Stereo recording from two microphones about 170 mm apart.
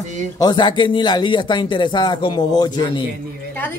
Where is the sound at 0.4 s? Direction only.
25° left (ahead or behind).